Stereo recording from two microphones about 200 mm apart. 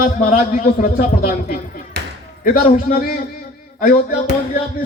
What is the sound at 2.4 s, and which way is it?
Speech, 40° left (ahead or behind).